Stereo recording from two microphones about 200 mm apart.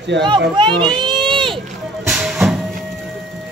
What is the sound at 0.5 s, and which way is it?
Speech, 25° right (ahead or behind).